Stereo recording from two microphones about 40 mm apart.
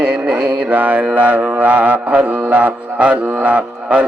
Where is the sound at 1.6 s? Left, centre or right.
Right.